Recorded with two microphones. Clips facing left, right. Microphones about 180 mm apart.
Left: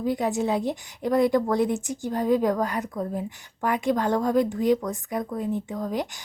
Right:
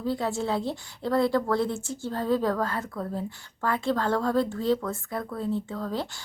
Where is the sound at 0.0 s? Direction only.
15° left (ahead or behind).